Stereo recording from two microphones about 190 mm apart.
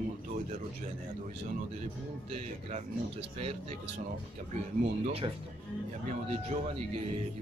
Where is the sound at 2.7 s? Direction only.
30° right (ahead or behind).